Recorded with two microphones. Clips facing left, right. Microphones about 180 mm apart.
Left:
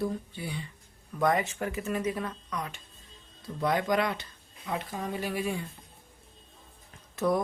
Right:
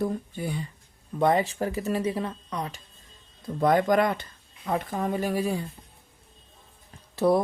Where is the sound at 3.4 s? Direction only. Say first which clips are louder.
Right 6 dB; 50° right (ahead or behind).